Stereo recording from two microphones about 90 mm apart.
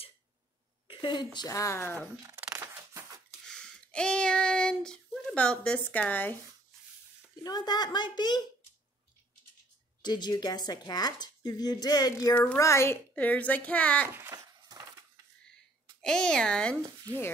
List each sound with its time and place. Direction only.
0.8 s a woman's voice: 60° left (ahead or behind)
1.5 s speech: 35° left (ahead or behind)
2.5 s scissors: 35° right (ahead or behind)
3.4 s child singing: 10° left (ahead or behind)
7.4 s a woman's voice: 50° left (ahead or behind)
10.0 s a woman's voice: 55° left (ahead or behind)
12.5 s speech: 35° left (ahead or behind)
13.1 s speech: 15° left (ahead or behind)
14.0 s a sound: 25° right (ahead or behind)
14.3 s a sound: 45° right (ahead or behind)
16.0 s speech: 10° left (ahead or behind)
17.1 s speech: 45° right (ahead or behind)